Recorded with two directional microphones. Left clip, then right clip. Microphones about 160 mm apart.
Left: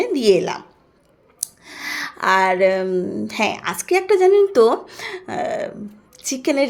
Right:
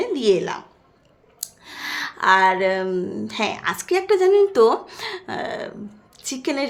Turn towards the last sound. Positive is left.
turn(degrees=20)  # may be behind; listen again after turning